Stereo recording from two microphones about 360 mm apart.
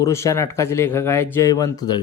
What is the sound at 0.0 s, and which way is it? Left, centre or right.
Speech, centre.